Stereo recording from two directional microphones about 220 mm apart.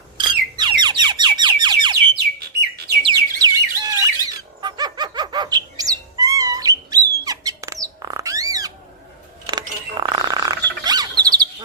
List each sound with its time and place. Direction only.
0.2 s squawk: 20° right (ahead or behind)
3.0 s bird: 20° right (ahead or behind)
10.0 s a sound: 20° right (ahead or behind)
10.8 s bird: 20° right (ahead or behind)